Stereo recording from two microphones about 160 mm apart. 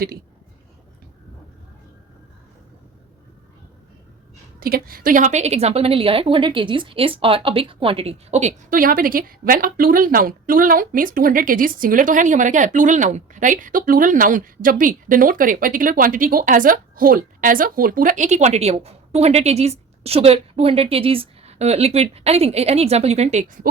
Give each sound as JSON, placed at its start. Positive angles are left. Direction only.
{"t": 4.6, "sound": "a woman's voice", "side_deg": -65}
{"t": 8.7, "sound": "a woman's voice", "side_deg": -60}